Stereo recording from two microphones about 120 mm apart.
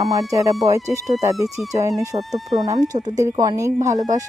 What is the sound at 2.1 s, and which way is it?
Speech, 50° right (ahead or behind).